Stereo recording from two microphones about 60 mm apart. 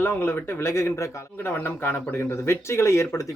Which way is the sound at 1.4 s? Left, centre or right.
Left.